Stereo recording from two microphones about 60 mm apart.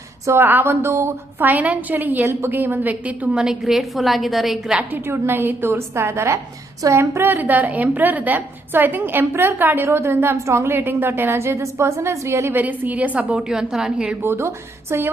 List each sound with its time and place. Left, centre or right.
0.4 s a woman's voice: right
1.4 s a woman's voice: right
3.4 s a woman's voice: centre
5.0 s a woman's voice: right
7.3 s a woman's voice: right
11.3 s a woman's voice: right
12.5 s a woman's voice: right
13.5 s a woman's voice: centre
14.2 s a woman's voice: right